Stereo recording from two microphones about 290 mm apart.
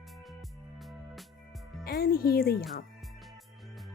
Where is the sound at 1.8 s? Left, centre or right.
Left.